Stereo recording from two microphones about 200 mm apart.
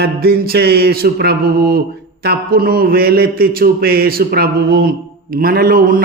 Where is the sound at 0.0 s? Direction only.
50° right (ahead or behind).